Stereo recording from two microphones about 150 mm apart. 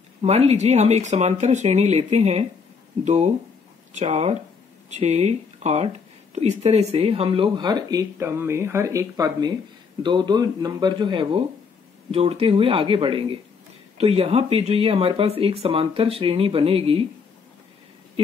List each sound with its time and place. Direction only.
0.2 s speech: 45° right (ahead or behind)
3.9 s speech: 45° right (ahead or behind)